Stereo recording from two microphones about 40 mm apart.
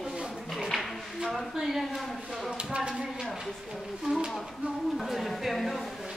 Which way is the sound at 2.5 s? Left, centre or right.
Right.